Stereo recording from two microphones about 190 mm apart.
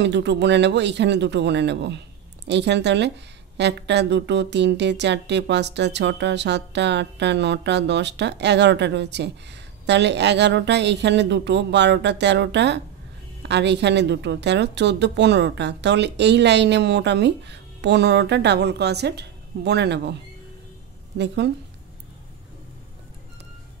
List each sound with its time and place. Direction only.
0.0 s speech: 65° right (ahead or behind)